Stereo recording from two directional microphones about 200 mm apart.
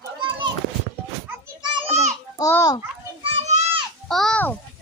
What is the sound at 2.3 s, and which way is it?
Speech, 15° left (ahead or behind).